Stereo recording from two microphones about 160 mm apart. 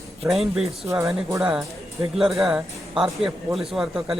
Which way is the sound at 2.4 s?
5° right (ahead or behind).